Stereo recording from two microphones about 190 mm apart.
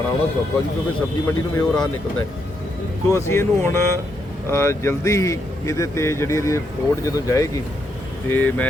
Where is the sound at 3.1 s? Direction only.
15° left (ahead or behind).